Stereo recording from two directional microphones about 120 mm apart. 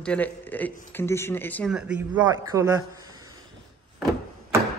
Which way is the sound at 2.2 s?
30° right (ahead or behind).